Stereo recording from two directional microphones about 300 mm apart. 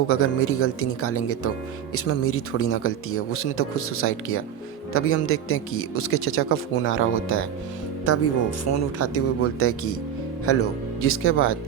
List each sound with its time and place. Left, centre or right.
0.1 s speech: left